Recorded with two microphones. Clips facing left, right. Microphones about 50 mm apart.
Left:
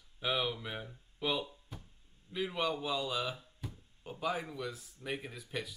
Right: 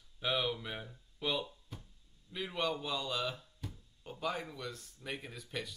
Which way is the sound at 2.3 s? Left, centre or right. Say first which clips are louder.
Left 2 dB; centre.